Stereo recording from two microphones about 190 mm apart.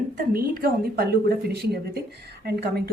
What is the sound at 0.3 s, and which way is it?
Speech, 50° right (ahead or behind).